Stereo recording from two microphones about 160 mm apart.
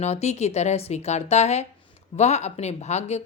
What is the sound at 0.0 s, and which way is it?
A woman's voice, 45° left (ahead or behind).